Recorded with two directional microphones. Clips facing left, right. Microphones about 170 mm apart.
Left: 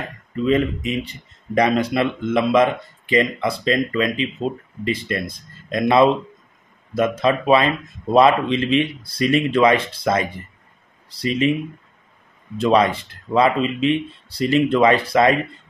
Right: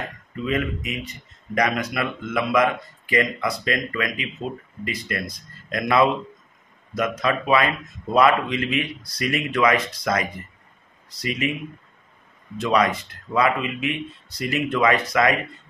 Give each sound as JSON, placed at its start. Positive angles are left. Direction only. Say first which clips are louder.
{"t": 0.5, "sound": "speech", "louder": "left 6 dB", "side_deg": 30}
{"t": 12.5, "sound": "speech", "louder": "left 4 dB", "side_deg": 30}